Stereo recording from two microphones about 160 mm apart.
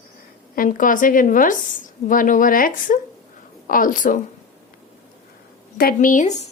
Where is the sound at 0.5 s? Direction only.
60° left (ahead or behind).